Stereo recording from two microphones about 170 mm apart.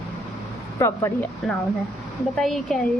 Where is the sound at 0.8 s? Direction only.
15° left (ahead or behind).